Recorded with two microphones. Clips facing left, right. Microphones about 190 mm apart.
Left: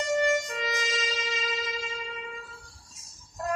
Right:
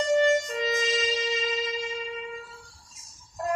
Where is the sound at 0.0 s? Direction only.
25° right (ahead or behind).